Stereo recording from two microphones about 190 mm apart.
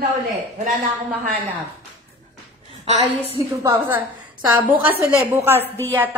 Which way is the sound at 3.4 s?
15° right (ahead or behind).